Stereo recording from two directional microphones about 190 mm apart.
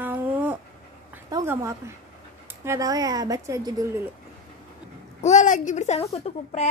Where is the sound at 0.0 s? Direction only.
10° right (ahead or behind).